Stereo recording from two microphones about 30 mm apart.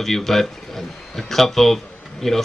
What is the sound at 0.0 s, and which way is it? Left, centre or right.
Speech, centre.